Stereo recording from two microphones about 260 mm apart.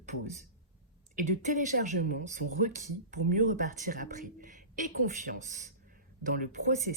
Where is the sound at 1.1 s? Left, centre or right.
Right.